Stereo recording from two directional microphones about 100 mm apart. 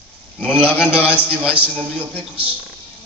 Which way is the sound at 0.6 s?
15° right (ahead or behind).